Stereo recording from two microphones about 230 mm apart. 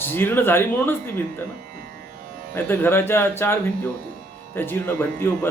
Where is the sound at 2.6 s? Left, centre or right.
Centre.